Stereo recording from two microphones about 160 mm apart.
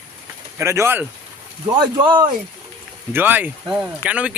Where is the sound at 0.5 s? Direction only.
15° right (ahead or behind).